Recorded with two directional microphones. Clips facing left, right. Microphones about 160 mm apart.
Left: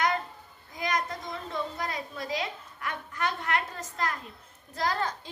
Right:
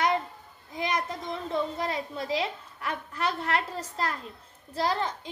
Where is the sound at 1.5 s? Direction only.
25° right (ahead or behind).